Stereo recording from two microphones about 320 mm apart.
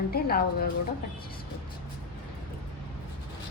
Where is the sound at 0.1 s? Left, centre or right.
Left.